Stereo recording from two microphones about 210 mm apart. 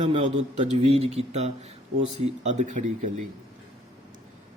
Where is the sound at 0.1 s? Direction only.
35° right (ahead or behind).